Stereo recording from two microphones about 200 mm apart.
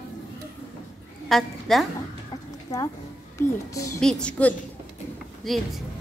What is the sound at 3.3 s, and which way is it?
Speech, 15° left (ahead or behind).